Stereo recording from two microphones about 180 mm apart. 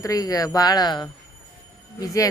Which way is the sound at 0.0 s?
20° left (ahead or behind).